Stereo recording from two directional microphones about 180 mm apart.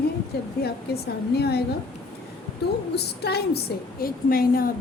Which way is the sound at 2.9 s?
65° left (ahead or behind).